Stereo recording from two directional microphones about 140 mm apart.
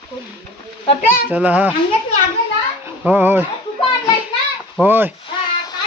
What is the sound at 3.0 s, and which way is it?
Speech, 15° right (ahead or behind).